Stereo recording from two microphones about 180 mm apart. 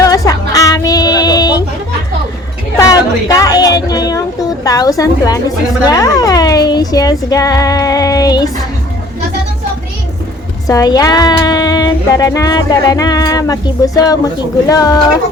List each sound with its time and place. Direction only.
0.0 s music: 20° left (ahead or behind)
2.7 s music: 20° left (ahead or behind)
4.6 s speech: 20° left (ahead or behind)
10.7 s speech: 20° left (ahead or behind)